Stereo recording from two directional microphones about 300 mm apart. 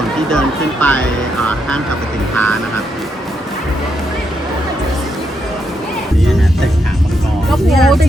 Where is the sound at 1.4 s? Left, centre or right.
Centre.